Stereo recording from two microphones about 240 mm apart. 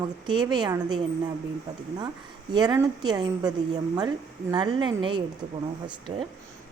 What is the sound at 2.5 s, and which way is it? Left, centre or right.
A woman's voice, centre.